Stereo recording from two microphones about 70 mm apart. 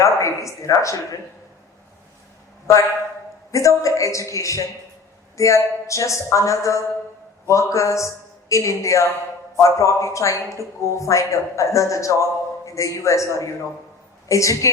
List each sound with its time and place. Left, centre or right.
0.0 s a man's voice: left
3.5 s a man's voice: left